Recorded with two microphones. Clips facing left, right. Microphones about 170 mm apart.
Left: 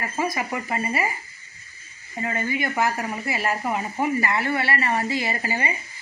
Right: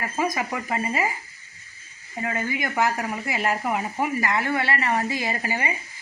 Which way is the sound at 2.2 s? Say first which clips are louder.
Left 1 dB; 15° right (ahead or behind).